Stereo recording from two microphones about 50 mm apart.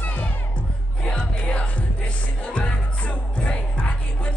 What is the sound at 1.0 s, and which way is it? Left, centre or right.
Music, centre.